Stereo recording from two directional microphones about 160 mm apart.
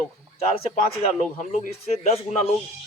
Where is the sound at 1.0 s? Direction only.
50° left (ahead or behind).